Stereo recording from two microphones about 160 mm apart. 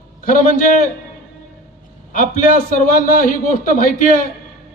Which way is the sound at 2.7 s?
55° left (ahead or behind).